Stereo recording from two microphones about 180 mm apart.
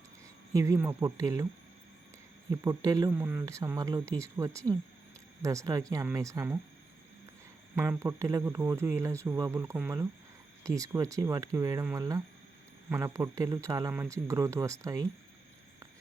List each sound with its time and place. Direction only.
0.5 s speech: 15° right (ahead or behind)
2.5 s speech: 20° right (ahead or behind)
7.8 s speech: 15° right (ahead or behind)